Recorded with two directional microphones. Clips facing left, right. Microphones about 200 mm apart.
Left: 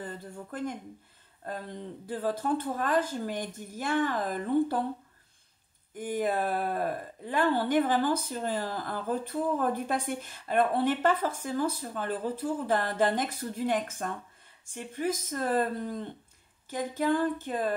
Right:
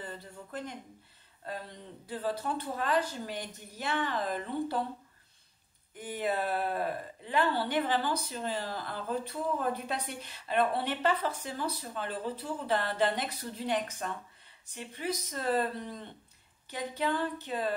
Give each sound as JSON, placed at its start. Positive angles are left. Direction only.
{"t": 0.0, "sound": "speech", "side_deg": 50}
{"t": 5.9, "sound": "speech", "side_deg": 45}
{"t": 16.7, "sound": "speech", "side_deg": 45}